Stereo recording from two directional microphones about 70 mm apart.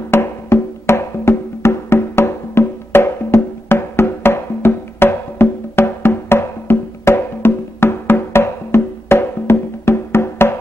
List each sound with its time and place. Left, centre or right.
0.1 s music: left